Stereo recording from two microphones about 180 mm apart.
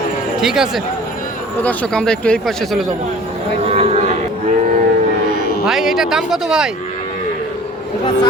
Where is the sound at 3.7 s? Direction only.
35° right (ahead or behind).